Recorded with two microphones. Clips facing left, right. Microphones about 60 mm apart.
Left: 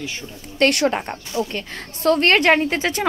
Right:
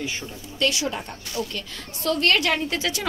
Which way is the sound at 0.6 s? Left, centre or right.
Left.